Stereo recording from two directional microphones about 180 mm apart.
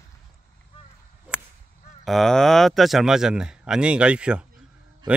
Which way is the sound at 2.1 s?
Centre (ahead or behind).